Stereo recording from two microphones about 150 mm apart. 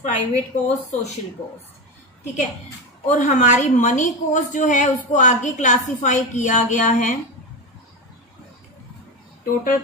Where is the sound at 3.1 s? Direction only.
55° left (ahead or behind).